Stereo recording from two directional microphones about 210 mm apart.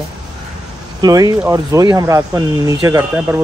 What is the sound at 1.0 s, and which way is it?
Speech, 15° right (ahead or behind).